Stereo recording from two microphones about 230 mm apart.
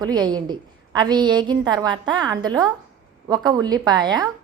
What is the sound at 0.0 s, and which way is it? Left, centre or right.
A woman's voice, centre.